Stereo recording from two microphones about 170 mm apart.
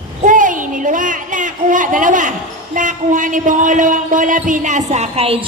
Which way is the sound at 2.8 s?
50° right (ahead or behind).